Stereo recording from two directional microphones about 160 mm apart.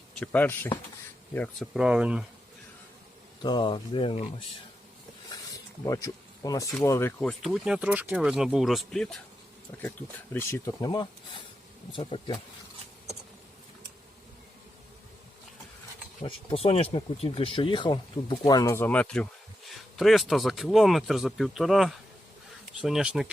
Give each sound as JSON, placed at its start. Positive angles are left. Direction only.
{"t": 0.3, "sound": "speech", "side_deg": 10}
{"t": 1.7, "sound": "speech", "side_deg": -5}
{"t": 3.4, "sound": "speech", "side_deg": 30}
{"t": 5.8, "sound": "speech", "side_deg": 20}
{"t": 7.2, "sound": "speech", "side_deg": 0}
{"t": 10.3, "sound": "speech", "side_deg": 20}
{"t": 16.2, "sound": "speech", "side_deg": 35}